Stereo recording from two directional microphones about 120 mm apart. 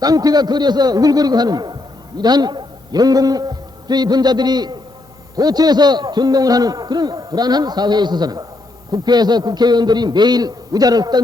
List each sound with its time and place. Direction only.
0.0 s a man's voice: 30° right (ahead or behind)